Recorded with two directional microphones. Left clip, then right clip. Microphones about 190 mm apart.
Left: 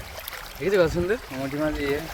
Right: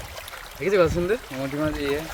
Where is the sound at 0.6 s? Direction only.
5° right (ahead or behind).